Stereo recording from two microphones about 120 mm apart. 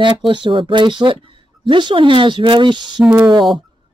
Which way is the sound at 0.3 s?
45° right (ahead or behind).